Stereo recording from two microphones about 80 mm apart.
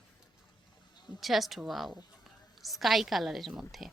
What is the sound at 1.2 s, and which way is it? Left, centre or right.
A woman's voice, centre.